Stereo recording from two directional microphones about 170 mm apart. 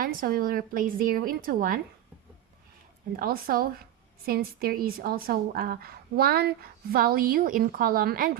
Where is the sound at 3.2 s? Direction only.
60° right (ahead or behind).